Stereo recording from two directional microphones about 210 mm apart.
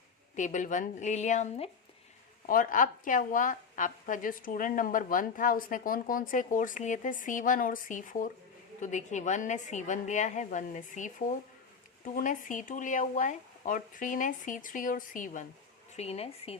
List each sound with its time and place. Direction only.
0.3 s a woman's voice: 35° left (ahead or behind)